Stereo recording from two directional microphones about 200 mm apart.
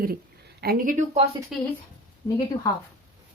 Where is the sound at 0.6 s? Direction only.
45° right (ahead or behind).